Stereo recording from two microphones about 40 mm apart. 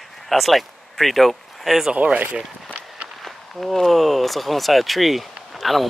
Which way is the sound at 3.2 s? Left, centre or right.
Centre.